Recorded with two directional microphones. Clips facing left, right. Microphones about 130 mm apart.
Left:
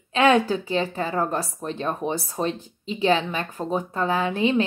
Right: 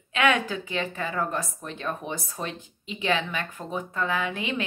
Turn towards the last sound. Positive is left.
turn(degrees=35)  # may be behind; listen again after turning